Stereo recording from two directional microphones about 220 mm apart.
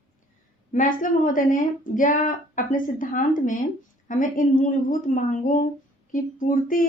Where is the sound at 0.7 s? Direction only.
35° left (ahead or behind).